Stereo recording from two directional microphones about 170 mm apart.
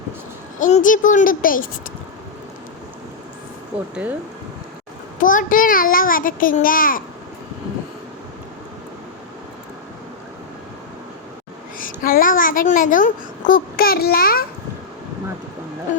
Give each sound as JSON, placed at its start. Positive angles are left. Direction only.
{"t": 0.6, "sound": "speech", "side_deg": 50}
{"t": 5.2, "sound": "a child's voice", "side_deg": 50}
{"t": 11.8, "sound": "a sound", "side_deg": 55}
{"t": 13.5, "sound": "a child's voice", "side_deg": 60}